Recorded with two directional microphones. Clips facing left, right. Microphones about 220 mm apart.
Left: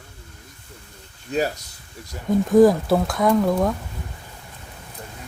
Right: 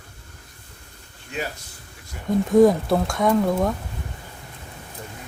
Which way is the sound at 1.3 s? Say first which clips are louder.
Left 8 dB; 40° left (ahead or behind).